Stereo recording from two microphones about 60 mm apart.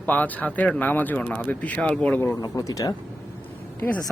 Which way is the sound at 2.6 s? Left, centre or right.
Left.